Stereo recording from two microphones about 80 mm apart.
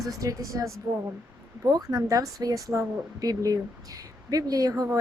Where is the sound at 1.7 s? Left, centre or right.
Right.